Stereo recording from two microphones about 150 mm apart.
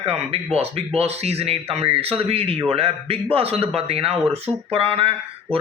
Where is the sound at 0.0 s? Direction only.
40° right (ahead or behind).